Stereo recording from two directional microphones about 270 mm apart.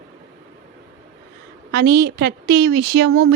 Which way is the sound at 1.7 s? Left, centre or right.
Right.